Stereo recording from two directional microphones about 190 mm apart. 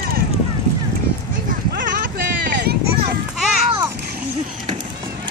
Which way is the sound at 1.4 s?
50° right (ahead or behind).